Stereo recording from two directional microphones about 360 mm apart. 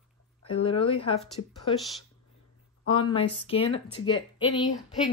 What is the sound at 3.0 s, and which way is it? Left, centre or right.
Speech, centre.